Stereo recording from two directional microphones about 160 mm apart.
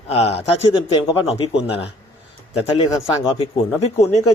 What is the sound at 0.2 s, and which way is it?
Speech, 40° left (ahead or behind).